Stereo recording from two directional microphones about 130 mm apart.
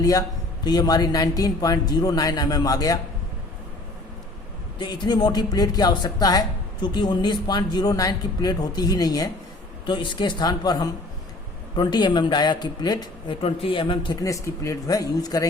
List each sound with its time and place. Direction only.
0.0 s a man's voice: 30° left (ahead or behind)
4.8 s a man's voice: 35° left (ahead or behind)
13.4 s a man's voice: 45° left (ahead or behind); by 15.4 s 30° left (ahead or behind)